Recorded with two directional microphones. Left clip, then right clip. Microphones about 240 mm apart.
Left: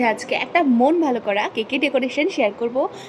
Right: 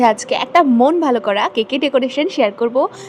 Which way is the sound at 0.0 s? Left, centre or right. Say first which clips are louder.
Right 6 dB; right.